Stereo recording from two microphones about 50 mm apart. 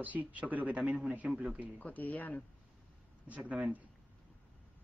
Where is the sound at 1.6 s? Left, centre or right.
Left.